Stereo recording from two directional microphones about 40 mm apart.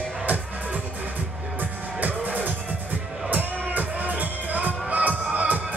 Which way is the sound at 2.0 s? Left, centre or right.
Right.